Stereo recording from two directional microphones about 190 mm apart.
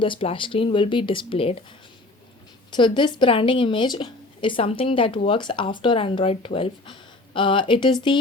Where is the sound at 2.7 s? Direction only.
25° left (ahead or behind).